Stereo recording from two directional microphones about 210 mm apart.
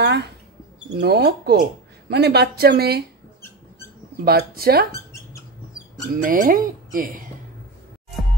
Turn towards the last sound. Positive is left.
turn(degrees=-40)  # may be behind; listen again after turning